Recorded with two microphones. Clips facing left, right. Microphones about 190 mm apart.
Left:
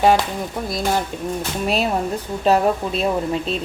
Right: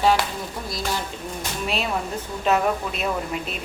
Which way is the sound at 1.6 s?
40° left (ahead or behind).